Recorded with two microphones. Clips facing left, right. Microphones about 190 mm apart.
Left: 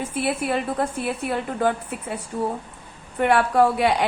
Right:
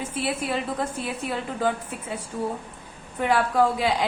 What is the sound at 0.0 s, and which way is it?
A woman's voice, 60° left (ahead or behind).